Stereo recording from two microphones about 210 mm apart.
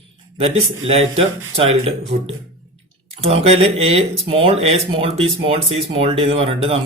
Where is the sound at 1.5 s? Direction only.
30° right (ahead or behind).